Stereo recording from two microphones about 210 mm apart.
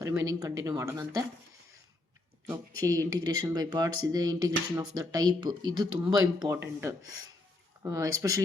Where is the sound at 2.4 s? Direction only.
15° right (ahead or behind).